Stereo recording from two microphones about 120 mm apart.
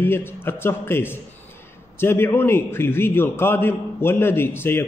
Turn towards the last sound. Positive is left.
turn(degrees=20)  # may be behind; listen again after turning